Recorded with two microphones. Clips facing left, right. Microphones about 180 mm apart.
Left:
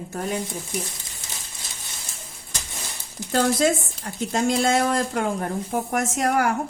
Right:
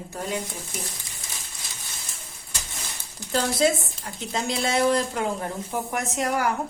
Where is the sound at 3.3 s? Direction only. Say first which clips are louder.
Left 2 dB; 50° left (ahead or behind).